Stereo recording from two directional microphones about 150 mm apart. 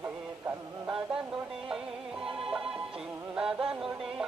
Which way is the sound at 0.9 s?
5° right (ahead or behind).